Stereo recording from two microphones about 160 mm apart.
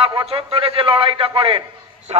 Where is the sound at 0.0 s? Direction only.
35° right (ahead or behind).